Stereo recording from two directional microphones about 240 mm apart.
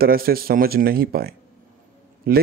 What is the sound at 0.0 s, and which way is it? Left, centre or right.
A man's voice, right.